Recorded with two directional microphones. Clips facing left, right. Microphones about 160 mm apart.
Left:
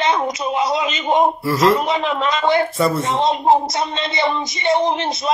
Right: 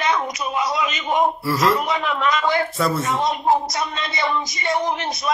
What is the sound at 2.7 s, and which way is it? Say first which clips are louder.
Speech: left 3 dB; centre (ahead or behind).